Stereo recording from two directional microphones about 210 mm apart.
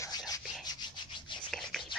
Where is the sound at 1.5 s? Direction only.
Centre (ahead or behind).